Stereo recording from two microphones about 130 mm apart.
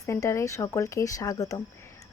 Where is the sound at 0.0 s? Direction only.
25° left (ahead or behind).